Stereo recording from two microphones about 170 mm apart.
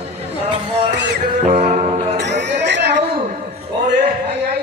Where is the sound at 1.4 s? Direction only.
45° right (ahead or behind).